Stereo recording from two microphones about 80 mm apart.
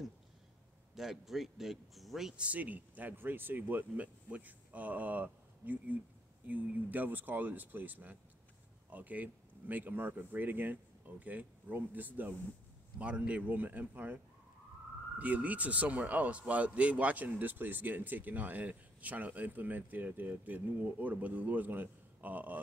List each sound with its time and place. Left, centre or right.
0.9 s speech: centre
2.4 s speech: centre